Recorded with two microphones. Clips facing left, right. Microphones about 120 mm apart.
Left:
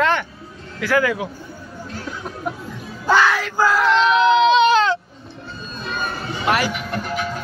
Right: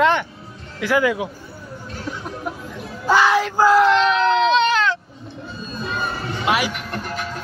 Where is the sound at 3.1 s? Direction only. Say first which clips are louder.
Right 1 dB; 15° right (ahead or behind).